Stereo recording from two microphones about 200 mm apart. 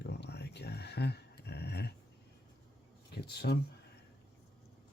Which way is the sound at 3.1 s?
55° left (ahead or behind).